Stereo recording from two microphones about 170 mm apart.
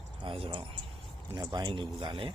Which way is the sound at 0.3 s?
30° right (ahead or behind).